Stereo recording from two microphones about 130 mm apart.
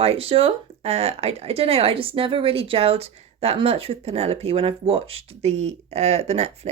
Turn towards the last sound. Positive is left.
turn(degrees=-55)  # may be behind; listen again after turning